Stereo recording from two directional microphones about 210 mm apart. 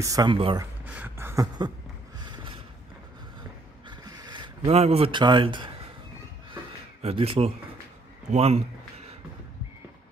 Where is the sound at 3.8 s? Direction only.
20° right (ahead or behind).